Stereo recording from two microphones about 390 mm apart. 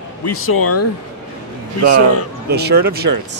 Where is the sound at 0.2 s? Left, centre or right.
Left.